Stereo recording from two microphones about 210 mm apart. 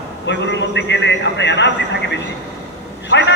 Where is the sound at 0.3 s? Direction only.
55° left (ahead or behind).